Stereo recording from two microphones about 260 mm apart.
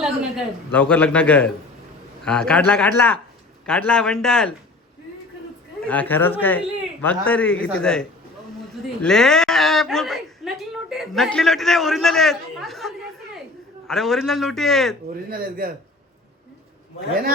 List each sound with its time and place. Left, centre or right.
0.0 s a woman's voice: centre
5.8 s a woman's voice: centre
15.3 s a man's voice: right